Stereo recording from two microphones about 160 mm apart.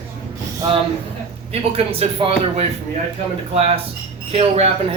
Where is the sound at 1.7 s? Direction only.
35° right (ahead or behind).